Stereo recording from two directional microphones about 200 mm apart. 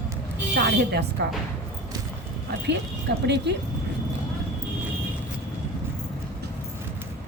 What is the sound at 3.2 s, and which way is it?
Speech, 60° right (ahead or behind).